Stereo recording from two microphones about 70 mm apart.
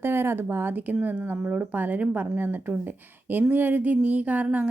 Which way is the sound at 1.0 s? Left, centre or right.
Right.